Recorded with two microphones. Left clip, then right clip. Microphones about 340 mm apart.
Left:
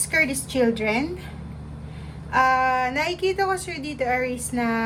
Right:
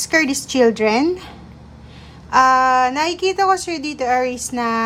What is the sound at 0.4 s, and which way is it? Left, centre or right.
Speech, centre.